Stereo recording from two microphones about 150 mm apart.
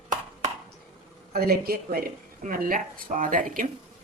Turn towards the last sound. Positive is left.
turn(degrees=-65)  # may be behind; listen again after turning